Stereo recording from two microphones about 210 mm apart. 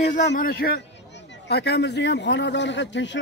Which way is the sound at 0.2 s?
50° left (ahead or behind).